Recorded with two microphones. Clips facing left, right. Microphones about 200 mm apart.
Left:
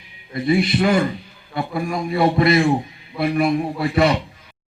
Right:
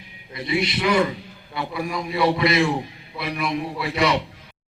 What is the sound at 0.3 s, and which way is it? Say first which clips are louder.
A man's voice: left 7 dB; 45° left (ahead or behind).